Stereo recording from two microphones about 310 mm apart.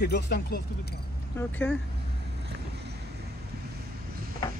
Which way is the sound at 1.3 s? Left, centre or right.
Centre.